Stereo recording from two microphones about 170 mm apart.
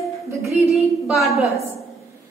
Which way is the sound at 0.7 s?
Centre (ahead or behind).